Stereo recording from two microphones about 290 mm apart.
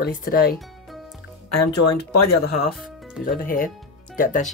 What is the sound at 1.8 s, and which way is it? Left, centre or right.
Speech, left.